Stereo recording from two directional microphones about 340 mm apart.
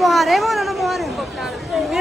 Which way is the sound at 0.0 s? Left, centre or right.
Centre.